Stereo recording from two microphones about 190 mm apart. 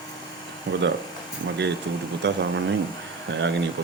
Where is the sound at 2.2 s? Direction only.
65° right (ahead or behind).